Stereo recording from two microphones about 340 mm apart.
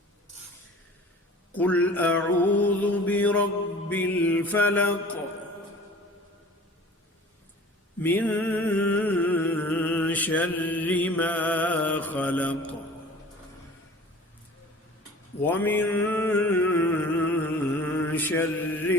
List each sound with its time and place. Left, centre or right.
1.5 s mantra: centre
8.0 s music: centre
15.4 s a sound: centre
18.1 s mantra: centre